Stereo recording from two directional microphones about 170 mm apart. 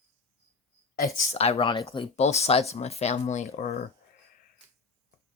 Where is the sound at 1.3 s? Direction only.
35° left (ahead or behind).